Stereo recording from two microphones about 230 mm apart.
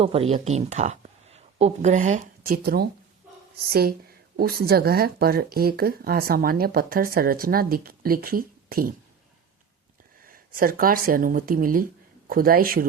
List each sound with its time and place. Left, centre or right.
0.0 s speech: right
10.2 s speech: right